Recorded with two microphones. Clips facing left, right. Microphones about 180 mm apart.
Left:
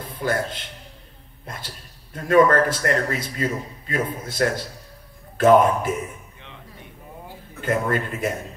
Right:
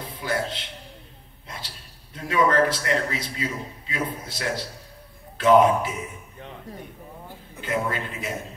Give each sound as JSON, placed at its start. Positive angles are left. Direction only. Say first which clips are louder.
{"t": 0.2, "sound": "a man's voice", "louder": "left 3 dB", "side_deg": 50}
{"t": 1.4, "sound": "a sound", "louder": "left 3 dB", "side_deg": 50}
{"t": 2.1, "sound": "a man's voice", "louder": "left 5 dB", "side_deg": 50}
{"t": 7.6, "sound": "a man's voice", "louder": "left 4 dB", "side_deg": 50}